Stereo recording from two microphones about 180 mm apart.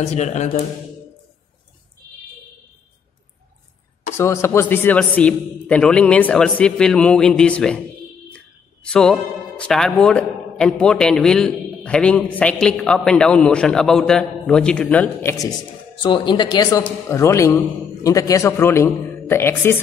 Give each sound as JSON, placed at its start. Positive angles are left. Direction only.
{"t": 0.0, "sound": "speech", "side_deg": 40}
{"t": 4.2, "sound": "a man's voice", "side_deg": 15}
{"t": 8.8, "sound": "a man's voice", "side_deg": 5}
{"t": 16.0, "sound": "a man's voice", "side_deg": 25}